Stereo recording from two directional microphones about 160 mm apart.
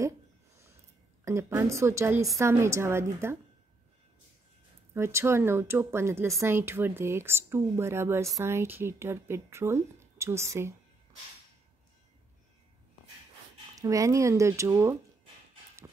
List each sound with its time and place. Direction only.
1.2 s speech: 15° right (ahead or behind)
4.9 s speech: 15° right (ahead or behind)
13.7 s speech: 20° right (ahead or behind)